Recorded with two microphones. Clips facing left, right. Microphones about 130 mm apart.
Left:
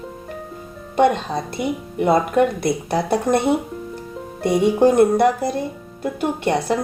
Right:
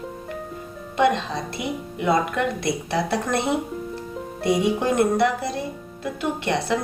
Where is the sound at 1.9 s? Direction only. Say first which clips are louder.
Left 6 dB; 50° left (ahead or behind).